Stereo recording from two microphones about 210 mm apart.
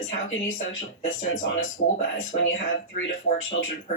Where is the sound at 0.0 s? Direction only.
65° left (ahead or behind).